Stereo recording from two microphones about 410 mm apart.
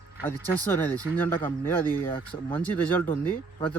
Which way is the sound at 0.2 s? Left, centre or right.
Centre.